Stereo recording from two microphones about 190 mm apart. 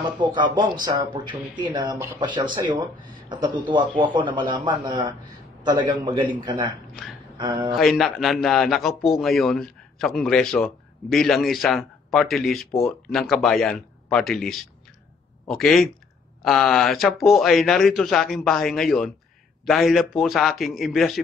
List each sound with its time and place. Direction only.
0.2 s a man's voice: 25° right (ahead or behind)
7.7 s a man's voice: centre (ahead or behind)